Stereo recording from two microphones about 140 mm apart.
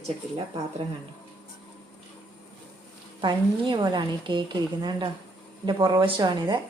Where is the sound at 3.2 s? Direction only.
35° right (ahead or behind).